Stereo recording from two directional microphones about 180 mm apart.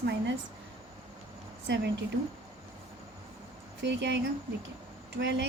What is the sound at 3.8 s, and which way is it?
Speech, 75° right (ahead or behind).